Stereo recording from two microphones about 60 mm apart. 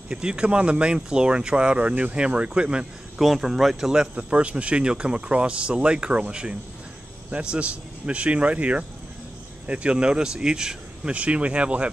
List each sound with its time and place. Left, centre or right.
0.1 s speech: centre
3.2 s speech: centre
4.1 s speech: centre